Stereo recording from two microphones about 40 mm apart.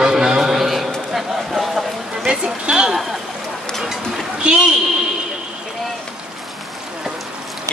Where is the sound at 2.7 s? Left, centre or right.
Centre.